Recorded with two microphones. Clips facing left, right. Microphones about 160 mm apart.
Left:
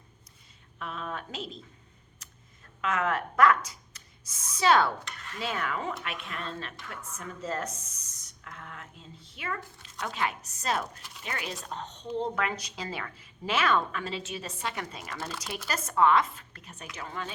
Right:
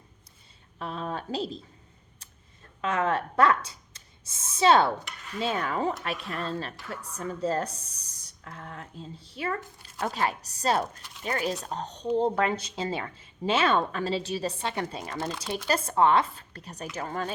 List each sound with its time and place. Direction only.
0.8 s speech: 35° right (ahead or behind)
2.8 s a woman's voice: 30° right (ahead or behind)